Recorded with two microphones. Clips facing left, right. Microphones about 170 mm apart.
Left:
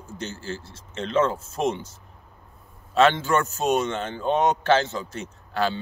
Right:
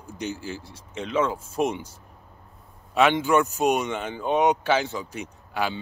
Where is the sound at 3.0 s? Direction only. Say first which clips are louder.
Even; 15° right (ahead or behind).